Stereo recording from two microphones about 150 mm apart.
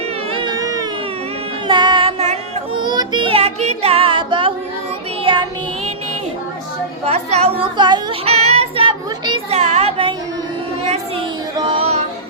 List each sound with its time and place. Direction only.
0.3 s music: 25° right (ahead or behind); by 2.4 s 45° right (ahead or behind)
2.7 s music: 25° right (ahead or behind)
7.0 s chatter: 45° right (ahead or behind)
8.3 s child singing: 45° right (ahead or behind)
9.6 s a sound: 45° right (ahead or behind)
11.5 s music: 35° right (ahead or behind)